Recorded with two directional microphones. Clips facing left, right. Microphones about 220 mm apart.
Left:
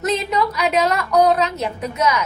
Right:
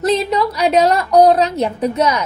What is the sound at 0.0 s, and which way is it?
A woman's voice, 35° right (ahead or behind).